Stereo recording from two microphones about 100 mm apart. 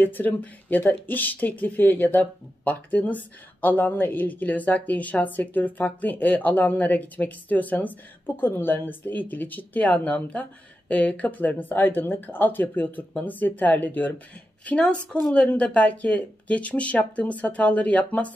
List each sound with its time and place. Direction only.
0.0 s speech: 20° left (ahead or behind)